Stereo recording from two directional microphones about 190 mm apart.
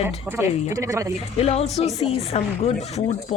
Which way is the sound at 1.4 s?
35° left (ahead or behind).